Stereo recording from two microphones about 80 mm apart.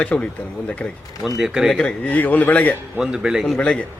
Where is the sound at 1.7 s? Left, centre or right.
Centre.